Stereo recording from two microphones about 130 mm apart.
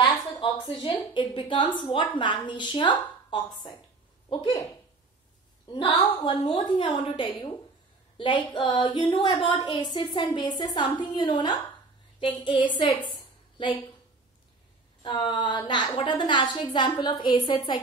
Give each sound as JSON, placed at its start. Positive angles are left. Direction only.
{"t": 0.0, "sound": "a sound", "side_deg": 30}
{"t": 1.1, "sound": "a woman's voice", "side_deg": 40}
{"t": 5.7, "sound": "a woman's voice", "side_deg": 35}
{"t": 15.0, "sound": "a woman's voice", "side_deg": 35}